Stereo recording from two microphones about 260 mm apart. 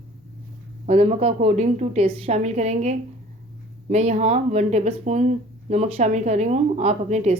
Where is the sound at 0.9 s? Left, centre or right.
Right.